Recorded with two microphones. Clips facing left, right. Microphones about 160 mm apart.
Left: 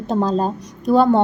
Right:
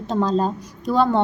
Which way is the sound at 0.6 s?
60° left (ahead or behind).